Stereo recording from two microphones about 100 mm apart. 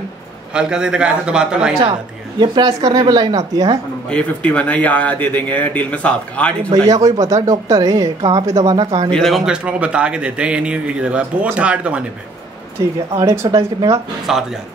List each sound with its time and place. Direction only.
0.6 s a man's voice: 10° right (ahead or behind)
2.3 s speech: 50° right (ahead or behind)
4.1 s speech: 10° left (ahead or behind)
6.7 s speech: 35° right (ahead or behind)
9.1 s a man's voice: centre (ahead or behind)
13.2 s speech: 30° right (ahead or behind)
14.3 s speech: 5° right (ahead or behind)